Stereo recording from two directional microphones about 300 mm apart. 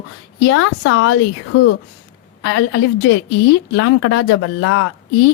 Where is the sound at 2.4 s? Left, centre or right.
Left.